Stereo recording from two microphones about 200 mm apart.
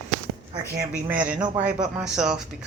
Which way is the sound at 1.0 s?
10° right (ahead or behind).